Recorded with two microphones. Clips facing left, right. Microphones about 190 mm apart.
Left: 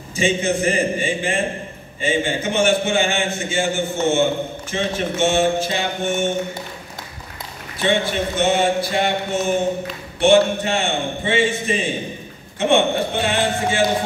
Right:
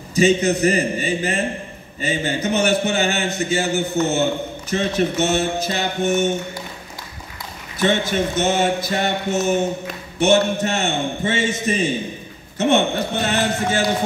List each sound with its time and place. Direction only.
0.1 s a man's voice: 40° right (ahead or behind)
7.8 s a man's voice: 40° right (ahead or behind)